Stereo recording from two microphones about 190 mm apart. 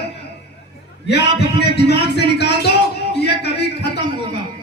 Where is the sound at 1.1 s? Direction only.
60° left (ahead or behind).